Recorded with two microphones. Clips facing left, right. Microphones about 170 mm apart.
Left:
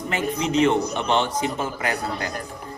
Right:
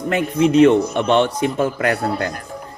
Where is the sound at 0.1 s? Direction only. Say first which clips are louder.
Right 8 dB; 65° right (ahead or behind).